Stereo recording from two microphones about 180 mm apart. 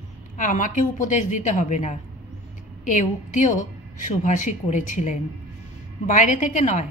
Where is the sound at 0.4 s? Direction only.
45° left (ahead or behind).